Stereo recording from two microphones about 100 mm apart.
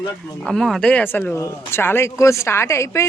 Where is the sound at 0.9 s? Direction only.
15° left (ahead or behind).